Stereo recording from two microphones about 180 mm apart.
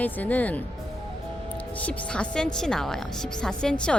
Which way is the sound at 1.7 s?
10° left (ahead or behind).